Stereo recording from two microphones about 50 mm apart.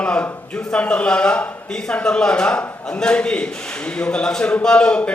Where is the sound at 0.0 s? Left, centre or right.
Left.